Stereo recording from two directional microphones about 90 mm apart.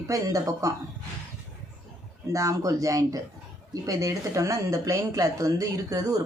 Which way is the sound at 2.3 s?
40° right (ahead or behind).